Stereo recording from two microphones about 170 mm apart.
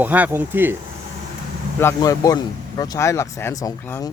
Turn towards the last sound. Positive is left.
turn(degrees=15)  # may be behind; listen again after turning